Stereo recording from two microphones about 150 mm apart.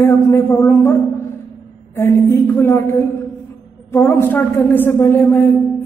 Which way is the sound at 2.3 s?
15° left (ahead or behind).